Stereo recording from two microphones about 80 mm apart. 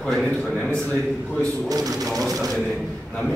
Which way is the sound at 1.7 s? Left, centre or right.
Right.